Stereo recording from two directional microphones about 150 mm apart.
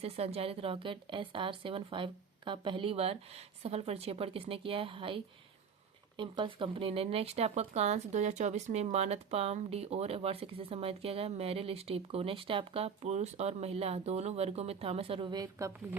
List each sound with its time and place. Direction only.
0.0 s a woman's voice: 40° right (ahead or behind); by 15.7 s 25° right (ahead or behind)